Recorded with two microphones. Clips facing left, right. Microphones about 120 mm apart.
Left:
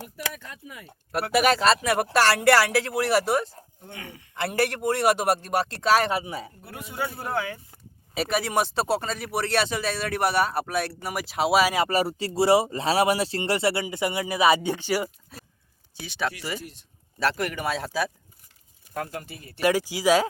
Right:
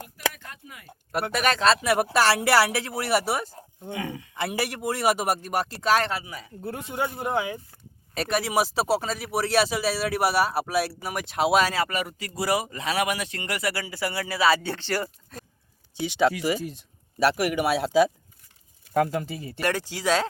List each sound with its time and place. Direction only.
1.1 s speech: 5° left (ahead or behind)
6.1 s speech: 25° left (ahead or behind)
6.7 s speech: 25° right (ahead or behind)
8.1 s speech: centre (ahead or behind)
11.9 s speech: 35° left (ahead or behind); by 15.4 s 10° left (ahead or behind)
16.0 s speech: 20° right (ahead or behind)
19.5 s speech: 10° left (ahead or behind)